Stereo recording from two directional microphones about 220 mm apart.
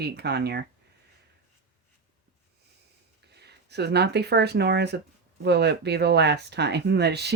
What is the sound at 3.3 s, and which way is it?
Speech, 50° right (ahead or behind).